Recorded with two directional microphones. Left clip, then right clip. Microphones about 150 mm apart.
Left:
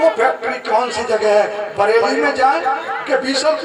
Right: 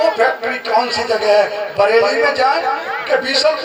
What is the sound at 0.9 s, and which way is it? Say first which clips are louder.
A man's voice: right 1 dB; 50° left (ahead or behind).